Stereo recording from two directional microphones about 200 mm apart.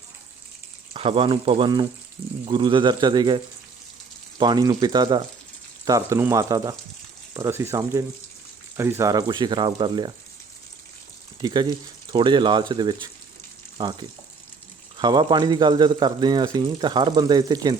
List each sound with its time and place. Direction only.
0.9 s speech: 30° right (ahead or behind)
11.3 s speech: 20° right (ahead or behind)
13.7 s frying: 20° right (ahead or behind)
14.9 s speech: 20° right (ahead or behind)